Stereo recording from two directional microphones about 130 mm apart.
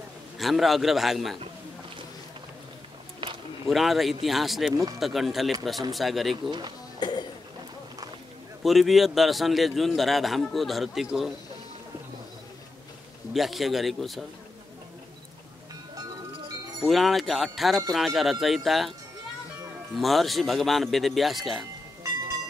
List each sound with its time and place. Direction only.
0.4 s a man's voice: centre (ahead or behind)
3.6 s a man's voice: centre (ahead or behind)
7.0 s a sound: 35° left (ahead or behind)
8.6 s a man's voice: centre (ahead or behind)
13.3 s a man's voice: centre (ahead or behind)
16.8 s a man's voice: centre (ahead or behind)
20.0 s a man's voice: centre (ahead or behind)